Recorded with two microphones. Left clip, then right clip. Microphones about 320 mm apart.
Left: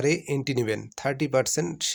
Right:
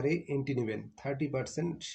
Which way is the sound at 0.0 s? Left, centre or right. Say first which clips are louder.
Left 7 dB; left.